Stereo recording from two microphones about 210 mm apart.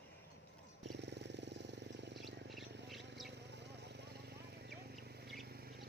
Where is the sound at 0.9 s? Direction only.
55° right (ahead or behind).